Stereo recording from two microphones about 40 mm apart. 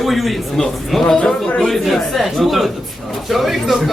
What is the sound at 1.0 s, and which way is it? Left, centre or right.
Speech, centre.